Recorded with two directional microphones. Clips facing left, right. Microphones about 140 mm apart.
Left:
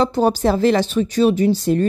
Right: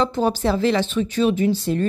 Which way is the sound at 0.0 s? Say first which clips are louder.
Left 4 dB; 40° left (ahead or behind).